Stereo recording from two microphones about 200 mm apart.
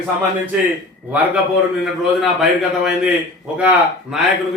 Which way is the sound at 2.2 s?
5° right (ahead or behind).